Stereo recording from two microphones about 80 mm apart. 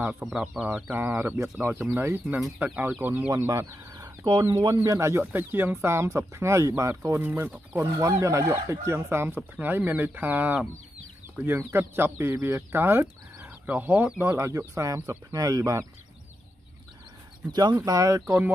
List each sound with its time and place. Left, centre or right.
0.2 s speech: centre
0.9 s speech: right
3.3 s speech: right
5.3 s speech: right
7.2 s speech: right
8.0 s speech: right; by 14.2 s centre
14.2 s speech: right
17.5 s speech: right
17.9 s speech: right